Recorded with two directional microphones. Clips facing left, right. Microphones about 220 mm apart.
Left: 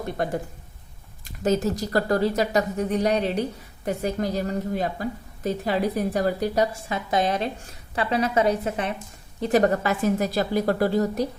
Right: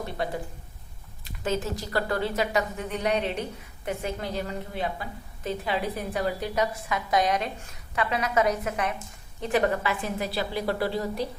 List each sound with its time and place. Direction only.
0.2 s a woman's voice: 45° left (ahead or behind)